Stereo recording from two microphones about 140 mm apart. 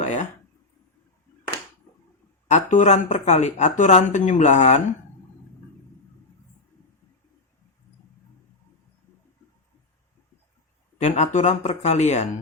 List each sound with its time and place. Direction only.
0.0 s speech: 55° left (ahead or behind)
2.5 s speech: 55° left (ahead or behind)
10.9 s speech: 55° left (ahead or behind)